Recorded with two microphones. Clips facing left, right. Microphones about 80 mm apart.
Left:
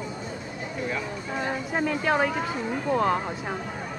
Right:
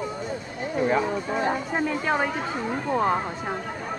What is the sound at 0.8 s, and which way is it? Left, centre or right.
Music, right.